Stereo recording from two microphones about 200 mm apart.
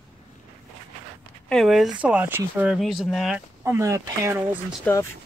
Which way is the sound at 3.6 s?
15° right (ahead or behind).